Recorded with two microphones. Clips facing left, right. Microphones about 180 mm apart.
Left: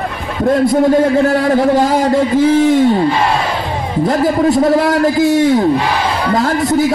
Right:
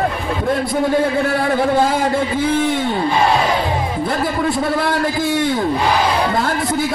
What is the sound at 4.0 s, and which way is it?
A man's voice, 40° left (ahead or behind).